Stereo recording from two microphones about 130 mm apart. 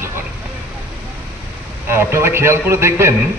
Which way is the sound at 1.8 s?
20° right (ahead or behind).